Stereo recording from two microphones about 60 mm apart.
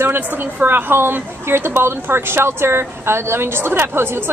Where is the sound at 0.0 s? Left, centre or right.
Right.